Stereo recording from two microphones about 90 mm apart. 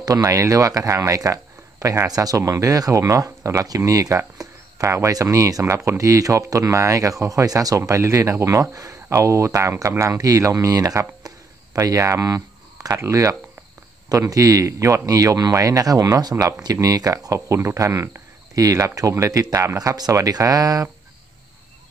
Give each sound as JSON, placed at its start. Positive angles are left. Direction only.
{"t": 0.0, "sound": "speech", "side_deg": -35}